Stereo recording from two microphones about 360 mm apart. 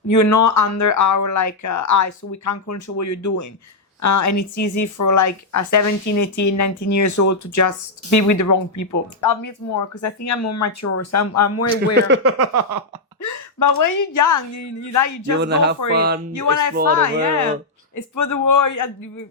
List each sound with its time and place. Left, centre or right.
0.1 s a woman's voice: left
11.9 s speech: right
13.2 s a woman's voice: left
15.4 s speech: right
16.3 s a woman's voice: left
16.7 s speech: right
17.9 s a woman's voice: left